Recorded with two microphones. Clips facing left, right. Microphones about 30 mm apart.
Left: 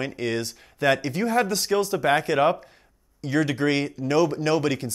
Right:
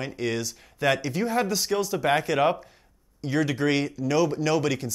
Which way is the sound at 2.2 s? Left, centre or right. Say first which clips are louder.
Left 2 dB; left.